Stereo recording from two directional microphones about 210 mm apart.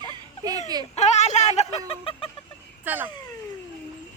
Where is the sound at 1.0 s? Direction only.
30° left (ahead or behind).